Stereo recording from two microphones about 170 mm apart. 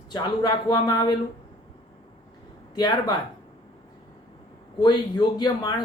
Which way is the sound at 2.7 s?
25° left (ahead or behind).